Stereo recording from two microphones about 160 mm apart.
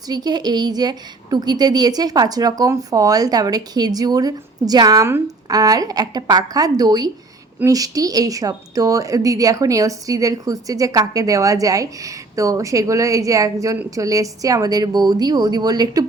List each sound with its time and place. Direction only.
0.1 s speech: 25° right (ahead or behind)